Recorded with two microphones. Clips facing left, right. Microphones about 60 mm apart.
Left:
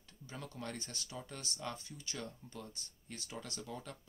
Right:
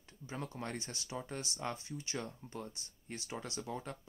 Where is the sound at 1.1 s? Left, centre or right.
Right.